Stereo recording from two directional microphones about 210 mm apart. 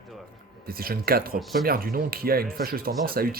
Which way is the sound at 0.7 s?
45° right (ahead or behind).